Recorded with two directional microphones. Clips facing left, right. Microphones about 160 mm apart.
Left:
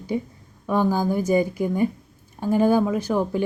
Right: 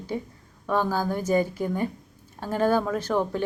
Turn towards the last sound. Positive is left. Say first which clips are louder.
# left 3 dB
turn(degrees=10)  # may be behind; listen again after turning